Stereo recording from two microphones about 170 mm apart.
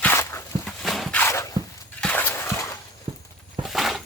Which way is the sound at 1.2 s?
15° left (ahead or behind).